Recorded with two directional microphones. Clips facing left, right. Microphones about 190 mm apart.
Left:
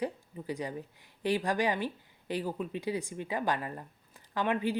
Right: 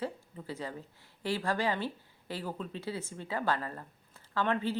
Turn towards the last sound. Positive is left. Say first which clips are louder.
# left 1 dB
turn(degrees=15)  # may be behind; listen again after turning